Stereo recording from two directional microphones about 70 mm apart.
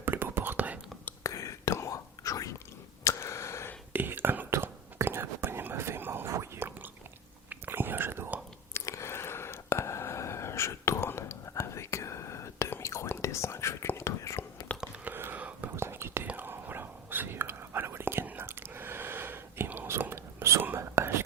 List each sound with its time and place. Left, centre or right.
0.0 s whispering: right
1.2 s whispering: left
3.0 s a sound: left
3.9 s whispering: right
8.7 s a sound: left
12.8 s whispering: left
15.0 s whispering: right
15.7 s whispering: right
16.2 s whispering: right